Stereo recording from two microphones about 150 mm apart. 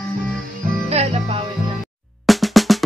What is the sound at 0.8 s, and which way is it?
Music, 45° right (ahead or behind).